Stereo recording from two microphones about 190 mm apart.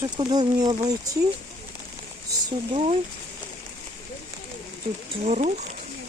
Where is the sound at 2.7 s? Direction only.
30° right (ahead or behind).